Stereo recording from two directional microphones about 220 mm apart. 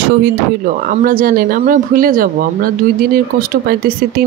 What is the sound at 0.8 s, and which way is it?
Speech, 40° right (ahead or behind).